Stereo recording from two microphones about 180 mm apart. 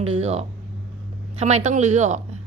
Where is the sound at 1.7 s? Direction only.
40° right (ahead or behind).